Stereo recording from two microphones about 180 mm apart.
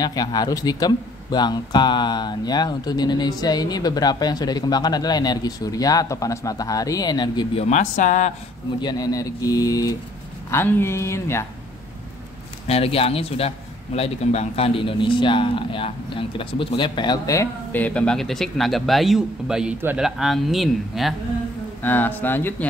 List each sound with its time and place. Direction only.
0.0 s speech: 20° left (ahead or behind)
7.6 s speech: 40° left (ahead or behind)
8.8 s speech: 20° left (ahead or behind)
12.6 s speech: 35° left (ahead or behind); by 21.1 s centre (ahead or behind)
21.8 s speech: 10° left (ahead or behind)